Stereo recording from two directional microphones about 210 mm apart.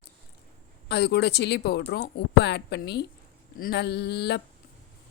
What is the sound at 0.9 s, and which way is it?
Speech, 50° left (ahead or behind).